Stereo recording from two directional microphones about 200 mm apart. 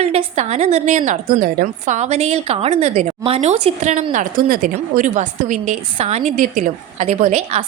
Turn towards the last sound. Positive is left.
turn(degrees=-35)  # may be behind; listen again after turning